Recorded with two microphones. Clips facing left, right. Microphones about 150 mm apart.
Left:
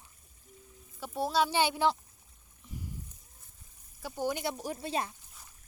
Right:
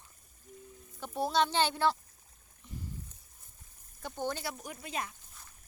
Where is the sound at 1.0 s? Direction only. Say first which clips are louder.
Even; centre (ahead or behind).